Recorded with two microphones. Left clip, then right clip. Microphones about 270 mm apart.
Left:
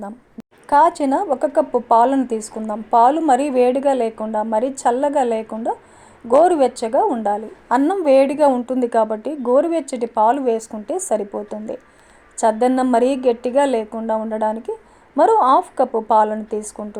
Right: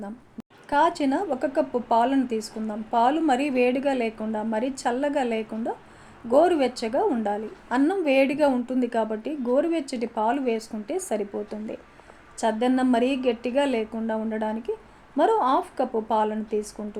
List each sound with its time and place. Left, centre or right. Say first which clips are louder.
0.7 s a woman's voice: left 8 dB; left